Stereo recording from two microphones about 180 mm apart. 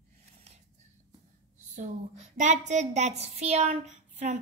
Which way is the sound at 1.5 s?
40° right (ahead or behind).